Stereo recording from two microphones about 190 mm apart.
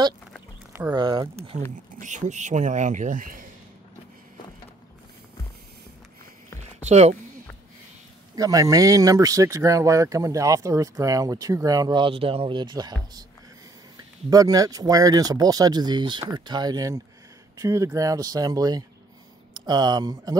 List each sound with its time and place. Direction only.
0.9 s speech: 25° right (ahead or behind)
1.5 s speech: 35° right (ahead or behind)
6.6 s a sound: 35° right (ahead or behind)
8.4 s speech: 20° right (ahead or behind)
14.3 s speech: 20° right (ahead or behind)